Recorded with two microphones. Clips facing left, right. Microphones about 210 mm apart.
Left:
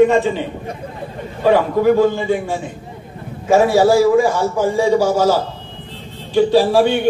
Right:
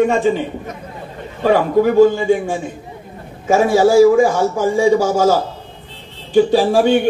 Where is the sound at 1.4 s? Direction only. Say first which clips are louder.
Even; 50° right (ahead or behind).